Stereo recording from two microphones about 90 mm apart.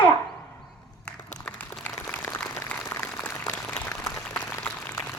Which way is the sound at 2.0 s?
15° left (ahead or behind).